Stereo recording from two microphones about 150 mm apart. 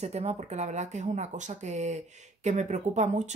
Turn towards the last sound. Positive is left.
turn(degrees=-50)  # may be behind; listen again after turning